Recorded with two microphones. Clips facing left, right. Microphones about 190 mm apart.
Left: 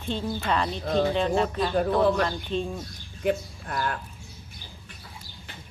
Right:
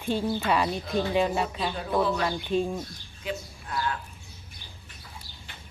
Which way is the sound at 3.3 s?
55° left (ahead or behind).